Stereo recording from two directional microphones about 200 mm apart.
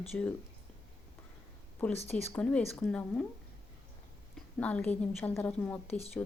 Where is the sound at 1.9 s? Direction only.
30° left (ahead or behind).